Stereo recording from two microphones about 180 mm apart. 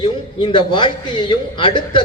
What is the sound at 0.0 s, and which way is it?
A man's voice, 30° left (ahead or behind).